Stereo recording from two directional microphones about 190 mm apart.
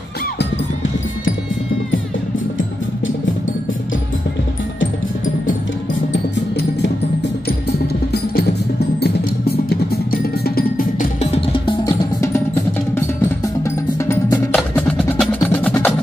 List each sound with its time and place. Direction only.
8.1 s percussion: 55° left (ahead or behind)
10.4 s music: 50° left (ahead or behind)
11.1 s music: 30° left (ahead or behind)
14.5 s wood block: 5° left (ahead or behind)